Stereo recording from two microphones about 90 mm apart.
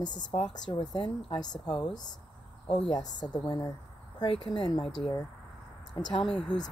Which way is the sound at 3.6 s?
45° left (ahead or behind).